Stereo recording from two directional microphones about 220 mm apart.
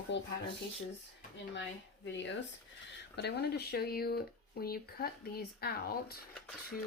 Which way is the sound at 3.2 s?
50° left (ahead or behind).